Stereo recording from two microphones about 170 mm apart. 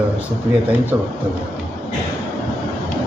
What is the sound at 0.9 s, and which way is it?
Speech, 15° right (ahead or behind).